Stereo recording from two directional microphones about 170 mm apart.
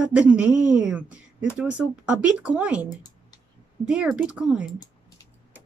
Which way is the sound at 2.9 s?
25° left (ahead or behind).